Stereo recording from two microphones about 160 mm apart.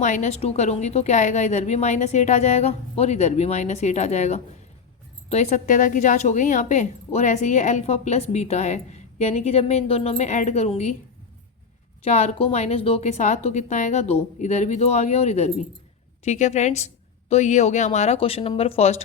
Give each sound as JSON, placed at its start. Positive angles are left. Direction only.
{"t": 0.0, "sound": "a woman's voice", "side_deg": 50}
{"t": 12.0, "sound": "a woman's voice", "side_deg": 40}